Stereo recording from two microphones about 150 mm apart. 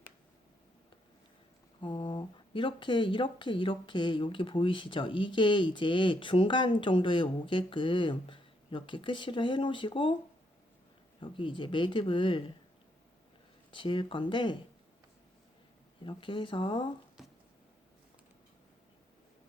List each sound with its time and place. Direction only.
1.8 s speech: 35° left (ahead or behind)
11.2 s speech: 35° left (ahead or behind)
13.7 s speech: 35° left (ahead or behind)
16.0 s speech: 35° left (ahead or behind)
17.2 s a sound: centre (ahead or behind)